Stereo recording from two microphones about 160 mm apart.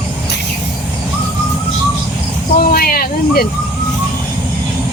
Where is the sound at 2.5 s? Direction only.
70° left (ahead or behind).